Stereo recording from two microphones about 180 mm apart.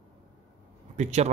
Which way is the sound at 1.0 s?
40° right (ahead or behind).